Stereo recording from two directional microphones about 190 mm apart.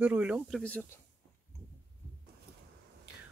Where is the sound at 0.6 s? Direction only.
10° left (ahead or behind).